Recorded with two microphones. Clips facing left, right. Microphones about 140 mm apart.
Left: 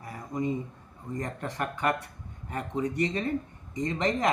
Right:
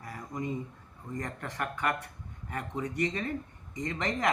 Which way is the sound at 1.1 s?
30° left (ahead or behind).